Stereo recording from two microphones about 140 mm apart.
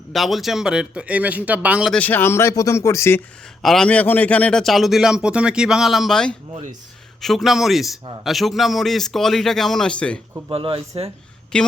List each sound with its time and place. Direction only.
0.1 s a man's voice: centre (ahead or behind)
1.9 s speech: 10° left (ahead or behind)
3.6 s a man's voice: 5° left (ahead or behind)
10.5 s speech: 40° right (ahead or behind)
11.5 s a woman's voice: 5° left (ahead or behind)